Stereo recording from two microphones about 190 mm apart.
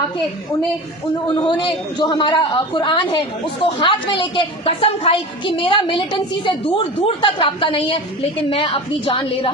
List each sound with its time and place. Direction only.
1.4 s a man's voice: 25° left (ahead or behind)